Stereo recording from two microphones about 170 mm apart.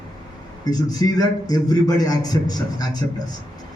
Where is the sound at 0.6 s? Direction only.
20° left (ahead or behind).